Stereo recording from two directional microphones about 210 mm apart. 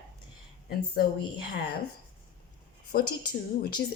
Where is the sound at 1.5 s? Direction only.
50° left (ahead or behind).